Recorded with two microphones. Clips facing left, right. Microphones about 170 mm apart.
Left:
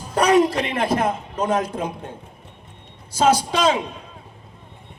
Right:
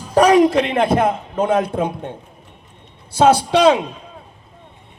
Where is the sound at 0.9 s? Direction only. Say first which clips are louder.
Right 4 dB; 55° right (ahead or behind).